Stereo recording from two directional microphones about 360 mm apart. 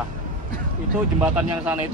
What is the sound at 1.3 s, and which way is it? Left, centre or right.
Speech, centre.